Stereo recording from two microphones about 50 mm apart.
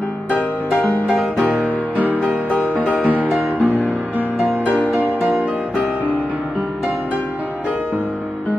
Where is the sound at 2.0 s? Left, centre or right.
Right.